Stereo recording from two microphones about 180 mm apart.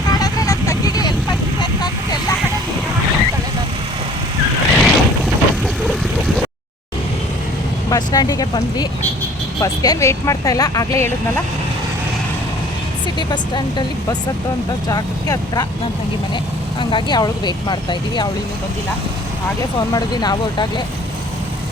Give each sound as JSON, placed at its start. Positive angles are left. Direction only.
{"t": 0.1, "sound": "vehicle", "side_deg": 20}
{"t": 4.7, "sound": "vehicle", "side_deg": 0}
{"t": 7.9, "sound": "speech", "side_deg": 20}
{"t": 13.1, "sound": "speech", "side_deg": 25}
{"t": 16.9, "sound": "speech", "side_deg": 25}
{"t": 19.9, "sound": "speech", "side_deg": 20}